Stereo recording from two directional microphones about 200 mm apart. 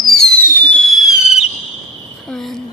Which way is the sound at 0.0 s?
Centre (ahead or behind).